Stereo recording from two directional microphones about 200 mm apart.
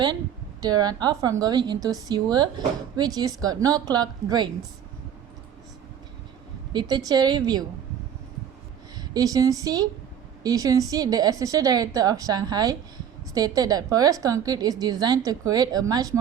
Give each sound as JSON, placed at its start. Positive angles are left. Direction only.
{"t": 0.6, "sound": "a woman's voice", "side_deg": -20}
{"t": 6.7, "sound": "a woman's voice", "side_deg": -20}
{"t": 9.0, "sound": "a woman's voice", "side_deg": -20}